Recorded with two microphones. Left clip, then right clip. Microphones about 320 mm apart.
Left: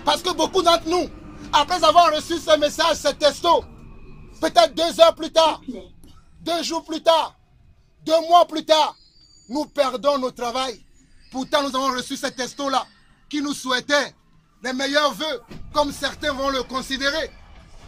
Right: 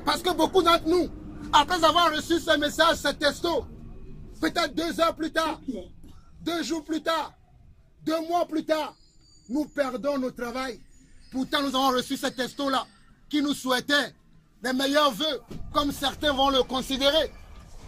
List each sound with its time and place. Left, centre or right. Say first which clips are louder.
0.0 s speech: left 4 dB; centre
8.0 s speech: left 11 dB; centre
9.8 s speech: left 9 dB; centre